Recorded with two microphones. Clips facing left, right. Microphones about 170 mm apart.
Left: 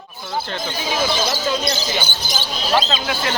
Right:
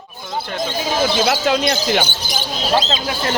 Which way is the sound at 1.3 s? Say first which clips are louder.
Right 4 dB; 65° right (ahead or behind).